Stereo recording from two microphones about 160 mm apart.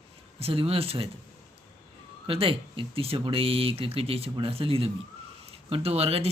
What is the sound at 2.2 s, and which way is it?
Speech, 35° right (ahead or behind).